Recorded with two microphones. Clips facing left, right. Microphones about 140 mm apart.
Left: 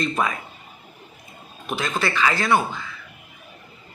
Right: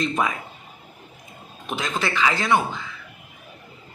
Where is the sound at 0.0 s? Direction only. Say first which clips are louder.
Even; 15° right (ahead or behind).